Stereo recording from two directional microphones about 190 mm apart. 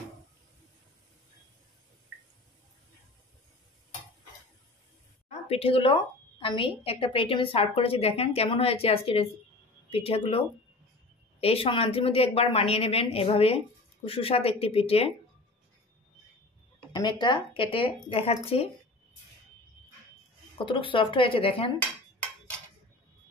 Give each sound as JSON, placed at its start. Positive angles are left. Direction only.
{"t": 5.5, "sound": "a woman's voice", "side_deg": 30}
{"t": 11.4, "sound": "a woman's voice", "side_deg": 30}
{"t": 16.9, "sound": "a woman's voice", "side_deg": 25}
{"t": 20.5, "sound": "a woman's voice", "side_deg": 25}